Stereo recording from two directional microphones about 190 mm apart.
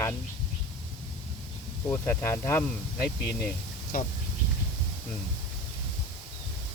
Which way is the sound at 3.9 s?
50° left (ahead or behind).